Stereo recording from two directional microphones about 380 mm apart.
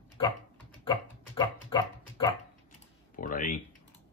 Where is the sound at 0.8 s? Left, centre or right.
Centre.